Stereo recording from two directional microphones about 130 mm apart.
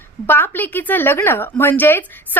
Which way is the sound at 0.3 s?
15° left (ahead or behind).